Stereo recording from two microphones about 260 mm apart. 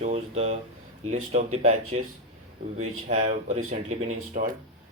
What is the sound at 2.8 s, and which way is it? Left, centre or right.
Speech, right.